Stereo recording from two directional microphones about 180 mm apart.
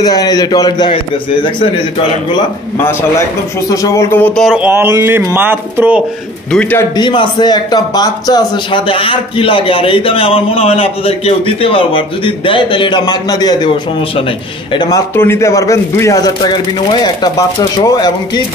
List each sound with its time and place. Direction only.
0.0 s a man's voice: 20° left (ahead or behind)
2.8 s a man's voice: 15° left (ahead or behind)
4.5 s speech: 10° right (ahead or behind)
6.5 s a man's voice: 10° left (ahead or behind)
7.0 s a man's voice: 25° left (ahead or behind)